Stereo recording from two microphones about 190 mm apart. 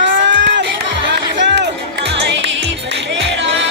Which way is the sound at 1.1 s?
65° right (ahead or behind).